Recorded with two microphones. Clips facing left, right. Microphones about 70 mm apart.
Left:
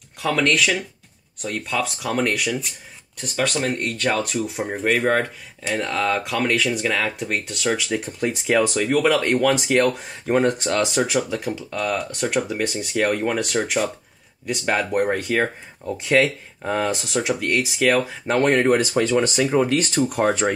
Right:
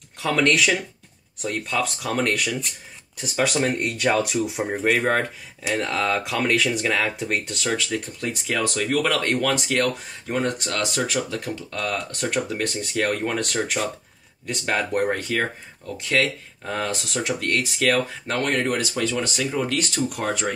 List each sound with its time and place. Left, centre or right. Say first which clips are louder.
0.2 s speech: even; centre
7.9 s speech: left 4 dB; centre
10.2 s speech: left 6 dB; left
10.8 s speech: left 2 dB; centre
18.2 s speech: left 6 dB; left
19.0 s speech: left 6 dB; left
19.3 s speech: left 6 dB; left
20.4 s speech: left 5 dB; left